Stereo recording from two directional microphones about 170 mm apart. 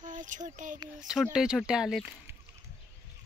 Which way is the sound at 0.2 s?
50° right (ahead or behind).